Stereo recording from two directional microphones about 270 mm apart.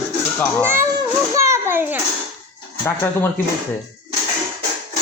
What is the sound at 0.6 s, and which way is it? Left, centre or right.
A child's voice, centre.